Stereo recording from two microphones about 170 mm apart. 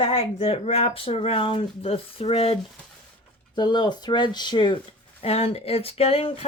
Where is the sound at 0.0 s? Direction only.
30° left (ahead or behind).